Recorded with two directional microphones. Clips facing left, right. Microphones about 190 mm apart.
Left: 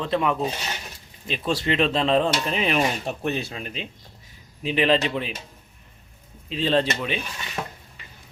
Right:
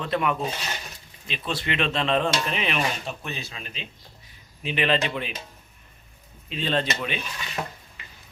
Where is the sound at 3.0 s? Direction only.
60° left (ahead or behind).